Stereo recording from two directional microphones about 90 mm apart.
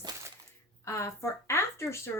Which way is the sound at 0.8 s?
30° left (ahead or behind).